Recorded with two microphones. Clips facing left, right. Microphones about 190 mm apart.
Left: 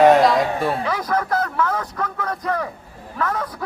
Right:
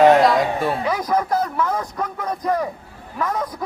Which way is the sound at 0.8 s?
15° right (ahead or behind).